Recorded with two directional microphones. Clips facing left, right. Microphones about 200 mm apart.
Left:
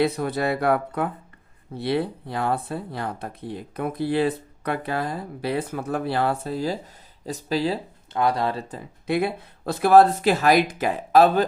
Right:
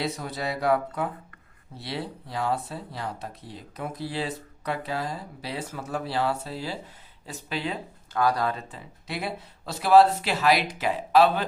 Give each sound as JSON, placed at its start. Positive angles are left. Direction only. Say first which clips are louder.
{"t": 0.0, "sound": "speech", "louder": "left 8 dB", "side_deg": 55}
{"t": 8.7, "sound": "speech", "louder": "left 11 dB", "side_deg": 50}